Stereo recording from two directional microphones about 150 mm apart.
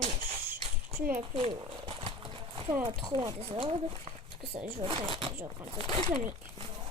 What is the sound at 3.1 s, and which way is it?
Speech, 35° right (ahead or behind).